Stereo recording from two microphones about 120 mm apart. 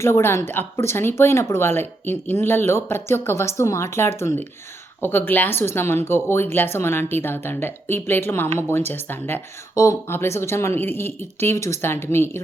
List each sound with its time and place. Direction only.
0.0 s speech: 20° left (ahead or behind)